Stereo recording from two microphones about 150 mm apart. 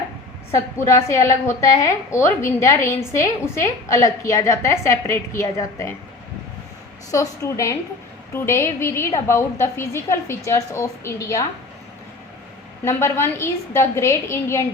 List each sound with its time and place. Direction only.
0.5 s a woman's voice: 20° left (ahead or behind)
7.1 s a woman's voice: 20° left (ahead or behind)
12.8 s a woman's voice: 20° left (ahead or behind)